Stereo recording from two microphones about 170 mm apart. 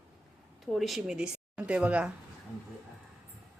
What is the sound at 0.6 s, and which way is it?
Speech, centre (ahead or behind).